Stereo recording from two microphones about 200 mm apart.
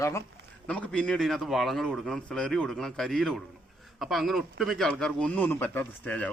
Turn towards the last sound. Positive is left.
turn(degrees=5)  # may be behind; listen again after turning